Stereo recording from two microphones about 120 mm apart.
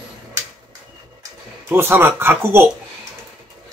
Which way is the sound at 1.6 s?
20° right (ahead or behind).